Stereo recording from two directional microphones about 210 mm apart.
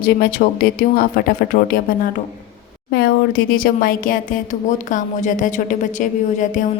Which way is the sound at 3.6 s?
45° left (ahead or behind).